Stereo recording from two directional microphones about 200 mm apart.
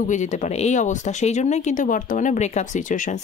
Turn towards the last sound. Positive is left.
turn(degrees=35)  # may be behind; listen again after turning